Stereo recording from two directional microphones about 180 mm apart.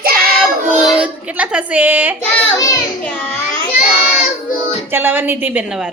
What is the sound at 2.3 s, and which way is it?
Child singing, 15° left (ahead or behind).